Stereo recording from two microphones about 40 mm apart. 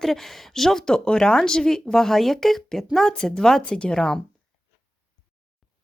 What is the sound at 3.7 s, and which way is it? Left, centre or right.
Speech, left.